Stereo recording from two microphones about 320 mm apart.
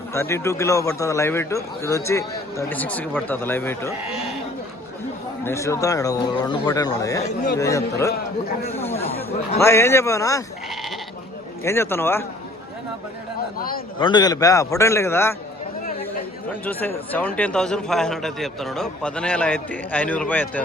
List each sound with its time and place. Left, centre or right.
0.1 s a man's voice: centre
5.5 s a man's voice: centre
11.6 s a man's voice: centre
13.6 s a man's voice: left
14.0 s a man's voice: centre
16.6 s a man's voice: centre